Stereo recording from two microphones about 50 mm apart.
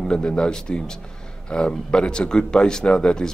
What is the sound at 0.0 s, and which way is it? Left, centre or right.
Speech, centre.